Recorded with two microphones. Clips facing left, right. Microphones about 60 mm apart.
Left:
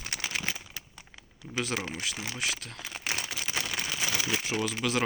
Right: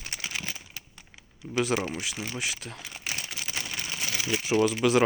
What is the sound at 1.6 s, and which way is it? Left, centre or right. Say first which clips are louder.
Speech: right 5 dB; centre.